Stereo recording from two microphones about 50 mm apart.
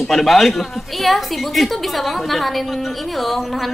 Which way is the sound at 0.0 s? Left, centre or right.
Centre.